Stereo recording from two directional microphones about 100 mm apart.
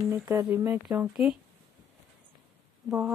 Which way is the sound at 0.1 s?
25° right (ahead or behind).